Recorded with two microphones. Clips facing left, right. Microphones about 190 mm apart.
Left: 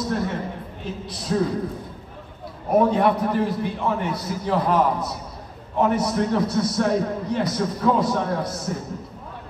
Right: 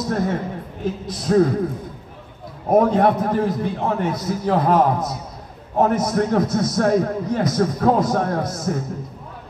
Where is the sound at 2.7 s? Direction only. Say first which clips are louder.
Right 3 dB; 45° right (ahead or behind).